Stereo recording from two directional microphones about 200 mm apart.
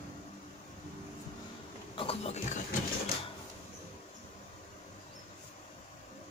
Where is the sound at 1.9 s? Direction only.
30° left (ahead or behind).